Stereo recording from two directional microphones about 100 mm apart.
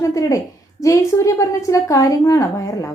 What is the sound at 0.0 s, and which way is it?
A woman's voice, 35° left (ahead or behind).